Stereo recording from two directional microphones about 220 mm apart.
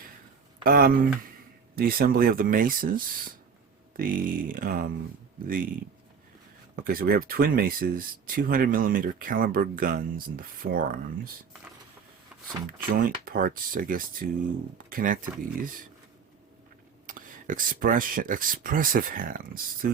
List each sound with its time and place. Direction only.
0.6 s speech: 40° right (ahead or behind)
6.8 s speech: 45° right (ahead or behind)
12.6 s speech: 40° right (ahead or behind)
17.1 s speech: 40° right (ahead or behind)